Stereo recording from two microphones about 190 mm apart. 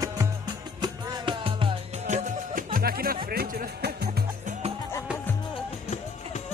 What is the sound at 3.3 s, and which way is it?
Speech, 55° right (ahead or behind).